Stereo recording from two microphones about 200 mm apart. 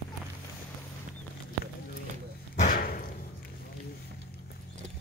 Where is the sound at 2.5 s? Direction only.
40° left (ahead or behind).